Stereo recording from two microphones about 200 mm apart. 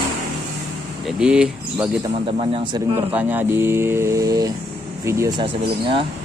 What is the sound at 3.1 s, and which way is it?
Speech, 10° right (ahead or behind).